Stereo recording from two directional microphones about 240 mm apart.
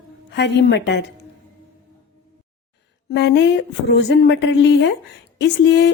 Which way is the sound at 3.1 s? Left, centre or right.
Left.